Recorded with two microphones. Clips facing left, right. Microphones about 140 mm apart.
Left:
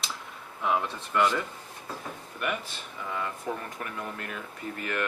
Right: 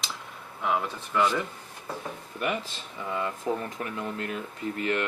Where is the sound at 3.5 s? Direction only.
25° right (ahead or behind).